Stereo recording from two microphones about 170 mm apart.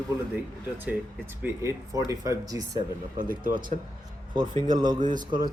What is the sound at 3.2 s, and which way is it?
Speech, 55° right (ahead or behind).